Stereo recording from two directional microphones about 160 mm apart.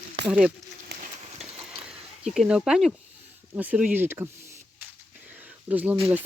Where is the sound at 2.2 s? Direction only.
5° right (ahead or behind).